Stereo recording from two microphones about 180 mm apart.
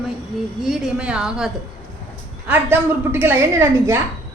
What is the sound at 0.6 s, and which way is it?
A woman's voice, 5° right (ahead or behind).